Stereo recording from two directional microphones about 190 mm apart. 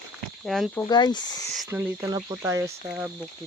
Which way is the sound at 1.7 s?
10° right (ahead or behind).